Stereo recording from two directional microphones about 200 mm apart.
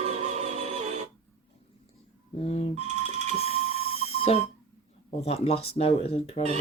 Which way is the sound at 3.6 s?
30° left (ahead or behind).